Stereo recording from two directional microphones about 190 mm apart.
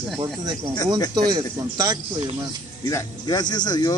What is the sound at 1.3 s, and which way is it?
Speech, 20° right (ahead or behind).